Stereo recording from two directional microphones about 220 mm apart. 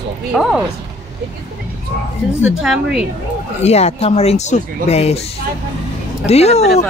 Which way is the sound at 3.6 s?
30° left (ahead or behind).